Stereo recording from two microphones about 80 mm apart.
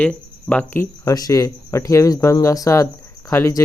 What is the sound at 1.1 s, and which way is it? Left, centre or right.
Speech, left.